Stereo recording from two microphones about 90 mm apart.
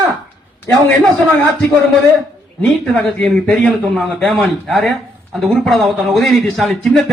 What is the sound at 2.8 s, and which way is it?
A man's voice, 10° left (ahead or behind).